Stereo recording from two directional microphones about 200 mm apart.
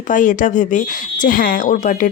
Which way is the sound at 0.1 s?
40° left (ahead or behind).